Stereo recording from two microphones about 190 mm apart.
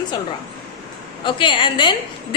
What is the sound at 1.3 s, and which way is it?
A woman's voice, 25° left (ahead or behind).